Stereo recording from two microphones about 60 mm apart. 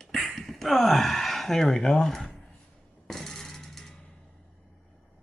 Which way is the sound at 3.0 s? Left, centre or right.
Centre.